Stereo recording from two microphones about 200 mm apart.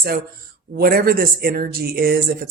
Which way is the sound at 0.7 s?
50° right (ahead or behind).